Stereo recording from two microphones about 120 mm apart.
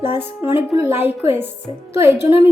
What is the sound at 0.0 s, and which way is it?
A woman's voice, 20° right (ahead or behind).